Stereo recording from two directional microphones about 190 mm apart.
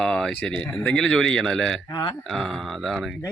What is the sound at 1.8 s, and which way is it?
Speech, 20° left (ahead or behind).